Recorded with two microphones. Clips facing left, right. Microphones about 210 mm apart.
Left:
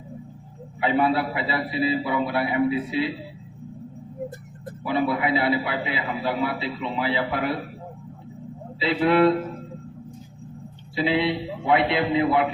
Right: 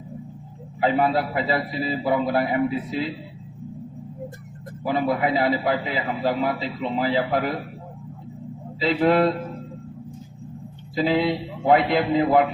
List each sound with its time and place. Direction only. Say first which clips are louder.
0.8 s a man's voice: right 1 dB; 40° right (ahead or behind)
4.9 s a man's voice: right 1 dB; 45° right (ahead or behind)
8.8 s a man's voice: even; 45° right (ahead or behind)
10.9 s a man's voice: right 2 dB; 45° right (ahead or behind)